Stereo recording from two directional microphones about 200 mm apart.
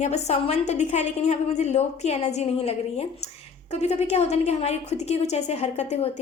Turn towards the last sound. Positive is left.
turn(degrees=35)  # may be behind; listen again after turning